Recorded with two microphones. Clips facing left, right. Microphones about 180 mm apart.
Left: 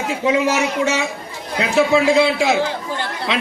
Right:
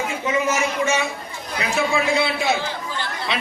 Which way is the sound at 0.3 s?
75° left (ahead or behind).